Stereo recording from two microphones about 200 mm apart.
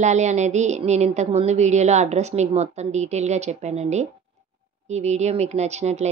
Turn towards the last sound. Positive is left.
turn(degrees=-35)  # may be behind; listen again after turning